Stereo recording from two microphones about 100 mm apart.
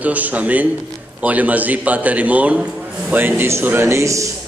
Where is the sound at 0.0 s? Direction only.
15° right (ahead or behind).